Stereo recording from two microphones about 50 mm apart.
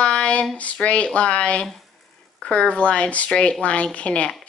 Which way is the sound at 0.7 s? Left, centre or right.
Left.